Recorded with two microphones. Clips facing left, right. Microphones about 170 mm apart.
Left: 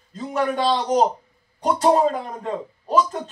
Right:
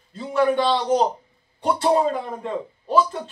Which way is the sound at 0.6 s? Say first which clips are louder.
Left 1 dB; 40° left (ahead or behind).